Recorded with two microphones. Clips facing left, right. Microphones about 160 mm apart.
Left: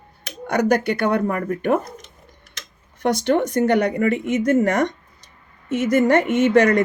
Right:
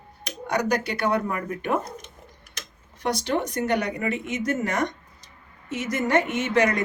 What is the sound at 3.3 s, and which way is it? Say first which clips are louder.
A woman's voice: left 7 dB; 55° left (ahead or behind).